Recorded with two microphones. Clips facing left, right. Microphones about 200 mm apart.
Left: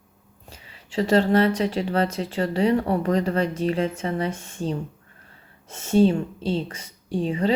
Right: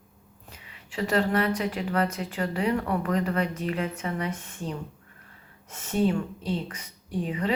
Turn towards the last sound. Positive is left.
turn(degrees=30)  # may be behind; listen again after turning